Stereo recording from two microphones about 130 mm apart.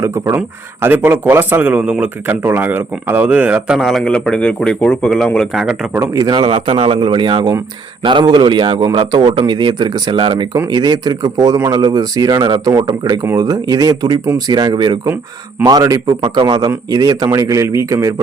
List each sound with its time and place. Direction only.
0.0 s speech: 20° right (ahead or behind)
3.8 s speech: centre (ahead or behind)
6.1 s a man's voice: 30° right (ahead or behind)
15.0 s speech: 15° right (ahead or behind)
15.6 s speech: 30° right (ahead or behind)